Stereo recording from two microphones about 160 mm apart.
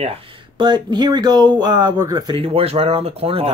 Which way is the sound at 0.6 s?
30° right (ahead or behind).